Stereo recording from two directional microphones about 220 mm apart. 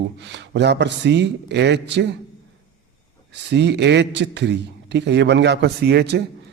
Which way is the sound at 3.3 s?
50° right (ahead or behind).